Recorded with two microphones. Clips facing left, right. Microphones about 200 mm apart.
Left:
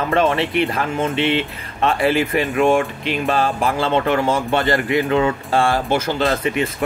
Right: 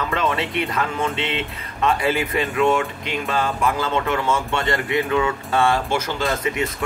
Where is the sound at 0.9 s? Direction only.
50° left (ahead or behind).